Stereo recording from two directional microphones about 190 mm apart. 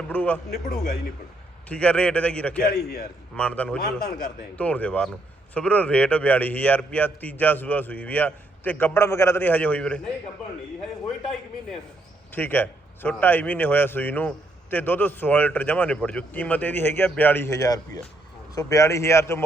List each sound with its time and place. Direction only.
0.1 s a man's voice: 10° left (ahead or behind)
1.6 s a man's voice: 5° left (ahead or behind)
2.8 s a man's voice: 55° left (ahead or behind)
3.3 s a man's voice: 5° left (ahead or behind)
12.3 s a man's voice: 10° left (ahead or behind)